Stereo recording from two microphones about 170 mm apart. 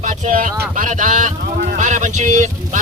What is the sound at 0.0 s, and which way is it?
Speech, 50° right (ahead or behind).